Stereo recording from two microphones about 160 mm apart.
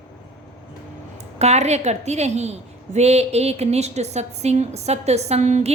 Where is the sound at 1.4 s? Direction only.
45° right (ahead or behind).